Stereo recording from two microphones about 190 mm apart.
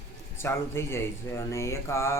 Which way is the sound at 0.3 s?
15° left (ahead or behind).